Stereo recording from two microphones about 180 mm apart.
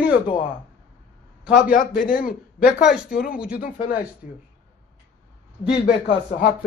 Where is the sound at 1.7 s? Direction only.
50° left (ahead or behind).